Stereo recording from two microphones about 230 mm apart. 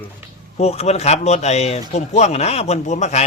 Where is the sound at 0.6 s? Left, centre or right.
Left.